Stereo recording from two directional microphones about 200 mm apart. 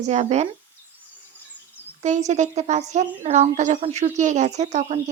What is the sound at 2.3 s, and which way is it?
A woman's voice, 35° right (ahead or behind).